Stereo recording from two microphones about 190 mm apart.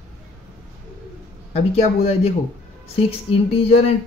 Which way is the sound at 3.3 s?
30° left (ahead or behind).